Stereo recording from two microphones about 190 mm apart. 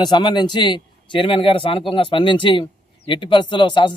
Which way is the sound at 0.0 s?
25° left (ahead or behind).